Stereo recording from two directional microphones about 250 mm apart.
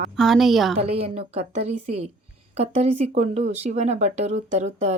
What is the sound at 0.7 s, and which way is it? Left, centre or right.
Speech, right.